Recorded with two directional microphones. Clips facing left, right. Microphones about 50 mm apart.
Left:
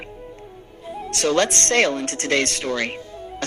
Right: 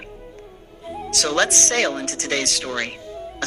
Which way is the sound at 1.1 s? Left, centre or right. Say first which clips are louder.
Left 1 dB; left.